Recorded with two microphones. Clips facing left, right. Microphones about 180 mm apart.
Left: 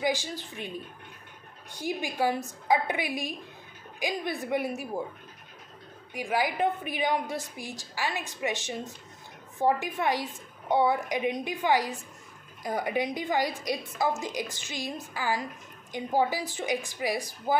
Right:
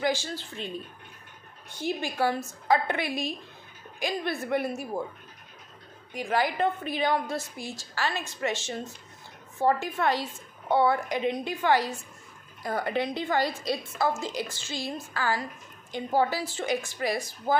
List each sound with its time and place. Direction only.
0.0 s a woman's voice: 15° left (ahead or behind)
1.7 s a woman's voice: 15° left (ahead or behind)
6.1 s a woman's voice: 10° left (ahead or behind)